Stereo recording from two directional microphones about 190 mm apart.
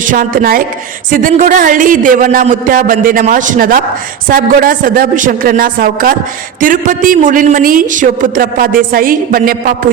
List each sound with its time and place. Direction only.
0.0 s a man's voice: 45° right (ahead or behind)